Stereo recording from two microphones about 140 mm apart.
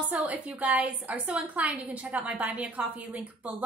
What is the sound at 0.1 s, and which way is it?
A woman's voice, 10° right (ahead or behind).